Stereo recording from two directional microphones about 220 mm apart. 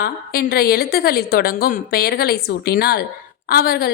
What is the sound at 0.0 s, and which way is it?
A woman's voice, 45° left (ahead or behind).